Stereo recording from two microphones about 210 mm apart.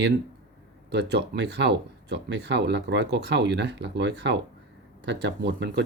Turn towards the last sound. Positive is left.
turn(degrees=-55)  # may be behind; listen again after turning